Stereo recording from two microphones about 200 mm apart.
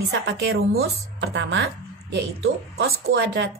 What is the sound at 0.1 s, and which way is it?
A woman's voice, 65° right (ahead or behind).